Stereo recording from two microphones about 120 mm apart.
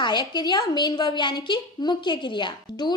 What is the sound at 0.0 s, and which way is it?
A woman's voice, 35° left (ahead or behind).